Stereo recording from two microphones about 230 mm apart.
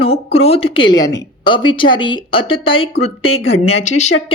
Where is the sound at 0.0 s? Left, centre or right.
Left.